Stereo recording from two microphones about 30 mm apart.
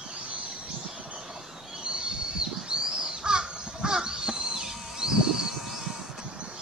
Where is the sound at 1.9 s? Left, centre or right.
Right.